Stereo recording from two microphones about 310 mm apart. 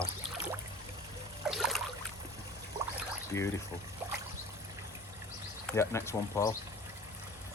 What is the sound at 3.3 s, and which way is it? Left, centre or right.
Speech, centre.